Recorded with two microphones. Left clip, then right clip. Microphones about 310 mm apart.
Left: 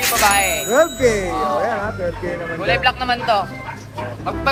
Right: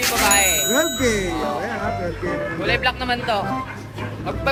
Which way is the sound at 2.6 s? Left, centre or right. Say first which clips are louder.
Left 5 dB; centre.